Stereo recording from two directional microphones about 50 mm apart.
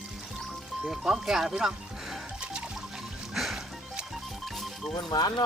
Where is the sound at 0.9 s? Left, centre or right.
Centre.